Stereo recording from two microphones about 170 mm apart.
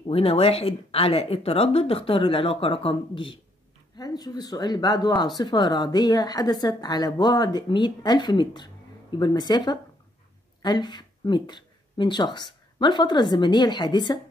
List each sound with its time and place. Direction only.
0.0 s a woman's voice: 35° left (ahead or behind)